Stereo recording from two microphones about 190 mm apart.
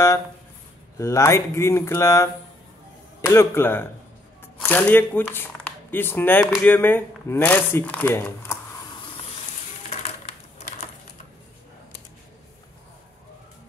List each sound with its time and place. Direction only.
0.9 s speech: 15° left (ahead or behind)